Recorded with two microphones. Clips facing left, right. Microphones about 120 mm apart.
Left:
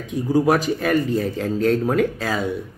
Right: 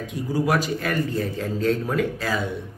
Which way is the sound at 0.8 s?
20° left (ahead or behind).